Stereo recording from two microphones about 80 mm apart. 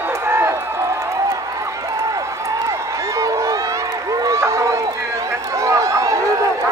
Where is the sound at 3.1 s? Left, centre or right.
Right.